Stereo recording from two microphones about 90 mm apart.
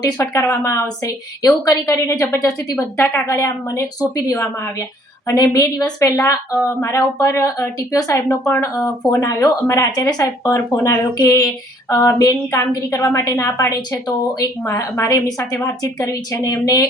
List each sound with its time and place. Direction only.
0.2 s a woman's voice: 30° left (ahead or behind)
5.3 s a woman's voice: 45° left (ahead or behind)